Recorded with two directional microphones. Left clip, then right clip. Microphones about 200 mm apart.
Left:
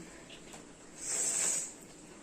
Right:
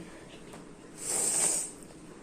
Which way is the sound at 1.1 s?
40° right (ahead or behind).